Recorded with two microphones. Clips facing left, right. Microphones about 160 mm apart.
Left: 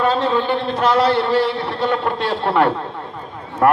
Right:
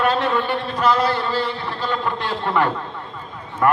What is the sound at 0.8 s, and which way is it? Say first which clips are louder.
A man's voice: left 3 dB; 65° left (ahead or behind).